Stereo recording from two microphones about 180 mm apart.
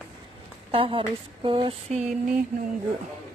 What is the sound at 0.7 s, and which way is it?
Speech, 30° right (ahead or behind).